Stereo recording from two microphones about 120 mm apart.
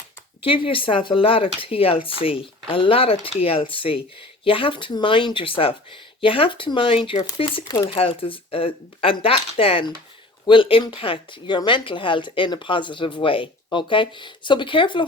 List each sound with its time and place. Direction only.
0.4 s speech: 50° left (ahead or behind)